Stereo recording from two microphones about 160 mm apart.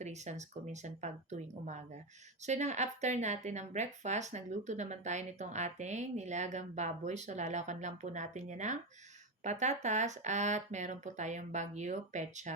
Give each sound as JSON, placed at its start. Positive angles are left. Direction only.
{"t": 0.0, "sound": "a woman's voice", "side_deg": -45}